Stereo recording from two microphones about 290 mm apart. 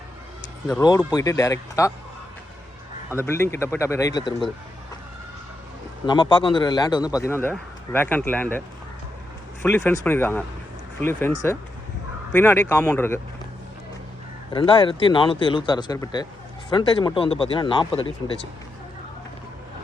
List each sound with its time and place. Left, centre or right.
0.7 s a man's voice: centre
3.2 s a man's voice: centre
6.1 s a man's voice: centre
9.6 s a man's voice: centre
12.3 s a man's voice: centre
14.5 s a man's voice: centre